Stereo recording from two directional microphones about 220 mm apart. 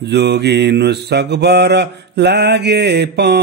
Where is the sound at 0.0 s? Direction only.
50° right (ahead or behind).